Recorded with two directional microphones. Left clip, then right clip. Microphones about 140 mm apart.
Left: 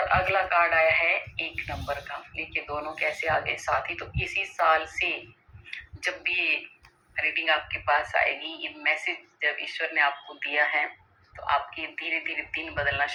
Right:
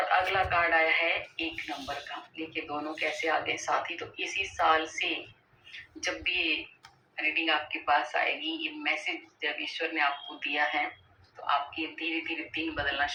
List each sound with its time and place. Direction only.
0.1 s speech: 40° left (ahead or behind)